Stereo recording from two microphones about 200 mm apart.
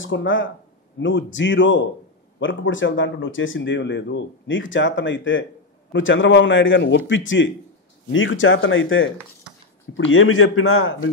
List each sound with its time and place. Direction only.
0.0 s a man's voice: 70° left (ahead or behind); by 11.1 s 90° left